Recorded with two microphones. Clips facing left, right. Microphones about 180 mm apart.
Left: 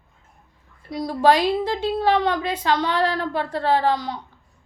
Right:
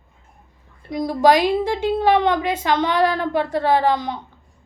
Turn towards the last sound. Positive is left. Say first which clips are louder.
# right 2 dB
turn(degrees=-15)  # may be behind; listen again after turning